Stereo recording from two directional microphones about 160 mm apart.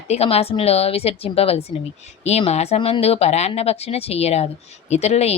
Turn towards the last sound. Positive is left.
turn(degrees=40)  # may be behind; listen again after turning